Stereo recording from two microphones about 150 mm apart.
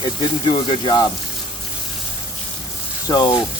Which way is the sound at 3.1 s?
30° left (ahead or behind).